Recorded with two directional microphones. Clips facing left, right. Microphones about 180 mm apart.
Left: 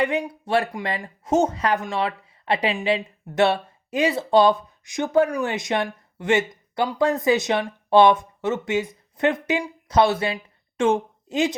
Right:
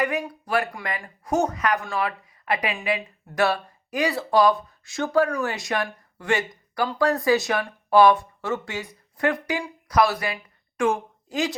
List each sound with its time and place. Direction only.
0.0 s speech: 25° left (ahead or behind)